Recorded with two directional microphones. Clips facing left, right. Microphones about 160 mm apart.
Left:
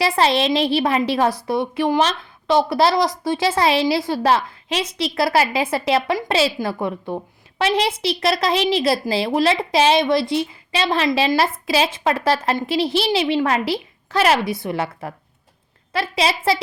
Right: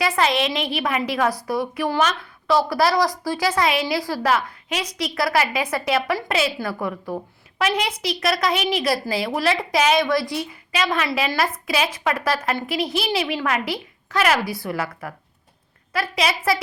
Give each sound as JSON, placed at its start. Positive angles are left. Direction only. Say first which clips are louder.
{"t": 0.0, "sound": "a woman's voice", "louder": "left 3 dB", "side_deg": 30}